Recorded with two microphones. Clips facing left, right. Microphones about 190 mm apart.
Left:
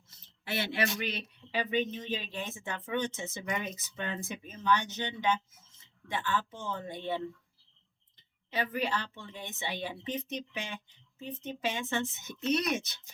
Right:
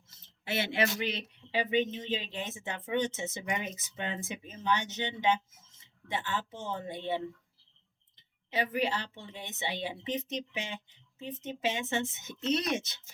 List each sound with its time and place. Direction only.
0.1 s speech: 25° right (ahead or behind)
8.5 s speech: 20° right (ahead or behind)